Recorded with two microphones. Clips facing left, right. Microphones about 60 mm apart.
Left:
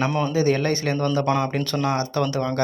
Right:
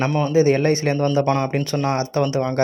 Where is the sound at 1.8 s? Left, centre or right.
Right.